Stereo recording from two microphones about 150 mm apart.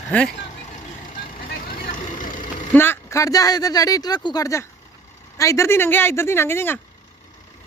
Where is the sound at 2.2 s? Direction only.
60° left (ahead or behind).